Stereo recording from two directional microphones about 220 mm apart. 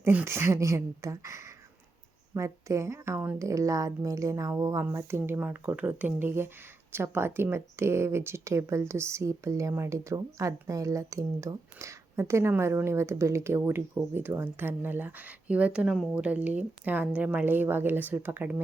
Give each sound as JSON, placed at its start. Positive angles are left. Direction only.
{"t": 0.0, "sound": "speech", "side_deg": -10}